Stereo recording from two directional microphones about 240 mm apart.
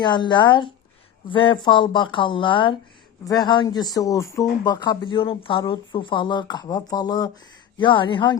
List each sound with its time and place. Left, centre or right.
0.0 s speech: centre